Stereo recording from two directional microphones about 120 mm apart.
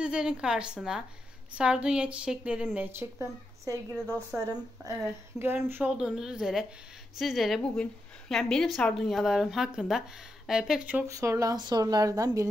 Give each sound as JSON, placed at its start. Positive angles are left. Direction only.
{"t": 0.0, "sound": "a woman's voice", "side_deg": -10}
{"t": 2.9, "sound": "a woman's voice", "side_deg": -20}
{"t": 4.8, "sound": "a woman's voice", "side_deg": -30}
{"t": 5.4, "sound": "a woman's voice", "side_deg": -20}
{"t": 5.9, "sound": "a woman's voice", "side_deg": -5}
{"t": 11.1, "sound": "a woman's voice", "side_deg": -25}